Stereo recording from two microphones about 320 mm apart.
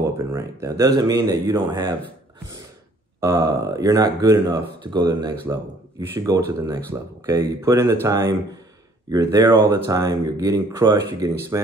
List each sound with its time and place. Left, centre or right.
0.2 s speech: centre
3.2 s speech: centre